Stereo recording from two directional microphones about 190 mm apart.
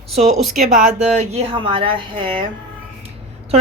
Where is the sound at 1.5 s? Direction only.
25° right (ahead or behind).